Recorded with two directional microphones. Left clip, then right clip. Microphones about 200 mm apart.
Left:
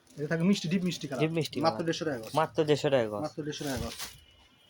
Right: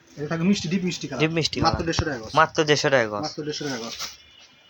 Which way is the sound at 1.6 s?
20° left (ahead or behind).